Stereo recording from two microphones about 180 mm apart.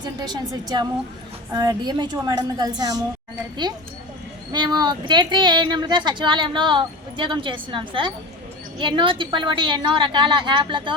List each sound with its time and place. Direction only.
0.0 s speech: 25° right (ahead or behind)
4.5 s speech: 25° right (ahead or behind)